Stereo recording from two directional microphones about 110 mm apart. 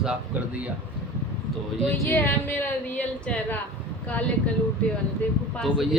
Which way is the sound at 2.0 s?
20° left (ahead or behind).